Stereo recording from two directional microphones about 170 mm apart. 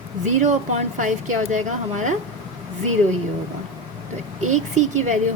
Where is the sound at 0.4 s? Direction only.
45° right (ahead or behind).